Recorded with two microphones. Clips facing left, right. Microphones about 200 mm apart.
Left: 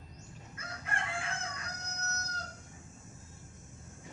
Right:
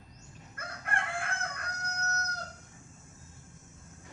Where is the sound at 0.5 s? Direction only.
55° right (ahead or behind).